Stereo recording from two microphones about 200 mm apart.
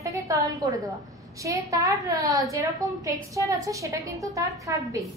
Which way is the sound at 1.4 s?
15° right (ahead or behind).